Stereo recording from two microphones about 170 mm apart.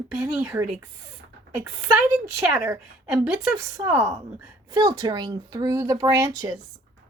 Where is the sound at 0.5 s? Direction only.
15° right (ahead or behind).